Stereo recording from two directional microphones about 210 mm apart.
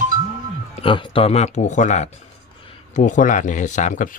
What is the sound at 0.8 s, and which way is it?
Speech, 25° left (ahead or behind).